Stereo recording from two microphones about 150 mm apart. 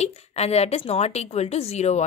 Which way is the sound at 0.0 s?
45° left (ahead or behind).